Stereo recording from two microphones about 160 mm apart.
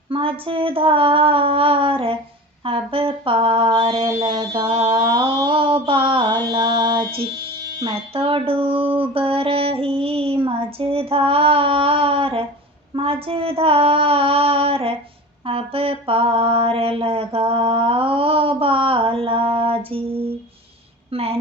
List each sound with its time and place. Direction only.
0.1 s mantra: 35° right (ahead or behind)
21.1 s a woman's voice: 40° right (ahead or behind)